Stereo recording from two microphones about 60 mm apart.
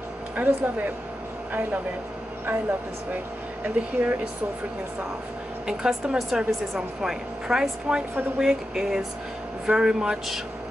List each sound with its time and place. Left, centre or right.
0.4 s speech: right
3.6 s speech: right
5.7 s speech: centre